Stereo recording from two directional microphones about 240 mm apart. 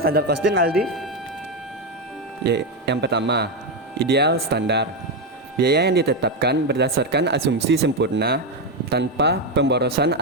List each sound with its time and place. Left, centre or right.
0.0 s speech: right
2.4 s speech: right